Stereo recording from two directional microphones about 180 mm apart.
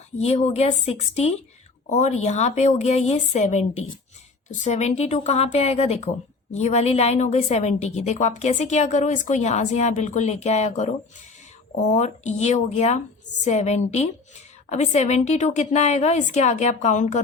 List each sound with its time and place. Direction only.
0.2 s a woman's voice: 35° left (ahead or behind)
11.9 s a woman's voice: 40° left (ahead or behind)